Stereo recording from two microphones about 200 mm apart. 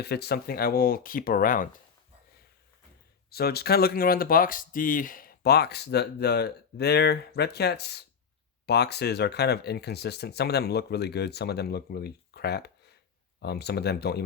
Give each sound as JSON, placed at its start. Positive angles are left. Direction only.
{"t": 0.0, "sound": "speech", "side_deg": 55}
{"t": 3.2, "sound": "speech", "side_deg": 50}